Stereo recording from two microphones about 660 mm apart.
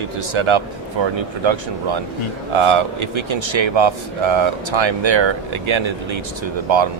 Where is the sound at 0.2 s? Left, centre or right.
Right.